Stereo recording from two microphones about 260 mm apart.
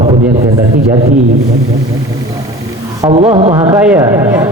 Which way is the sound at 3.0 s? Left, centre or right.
Right.